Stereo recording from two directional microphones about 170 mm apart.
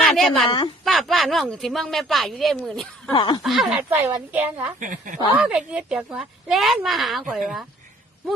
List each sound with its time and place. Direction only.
0.0 s a sound: centre (ahead or behind)
0.4 s speech: 30° left (ahead or behind)
0.9 s a woman's voice: centre (ahead or behind)
3.1 s speech: 25° left (ahead or behind)
3.4 s a woman's voice: centre (ahead or behind)
3.8 s a woman's voice: 10° right (ahead or behind)
4.8 s speech: 50° right (ahead or behind)
5.4 s a woman's voice: 5° right (ahead or behind)